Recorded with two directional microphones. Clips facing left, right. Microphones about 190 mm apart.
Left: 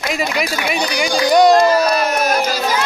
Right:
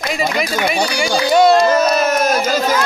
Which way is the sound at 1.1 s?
15° left (ahead or behind).